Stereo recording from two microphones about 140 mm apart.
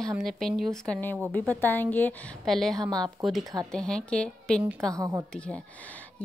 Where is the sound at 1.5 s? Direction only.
15° left (ahead or behind).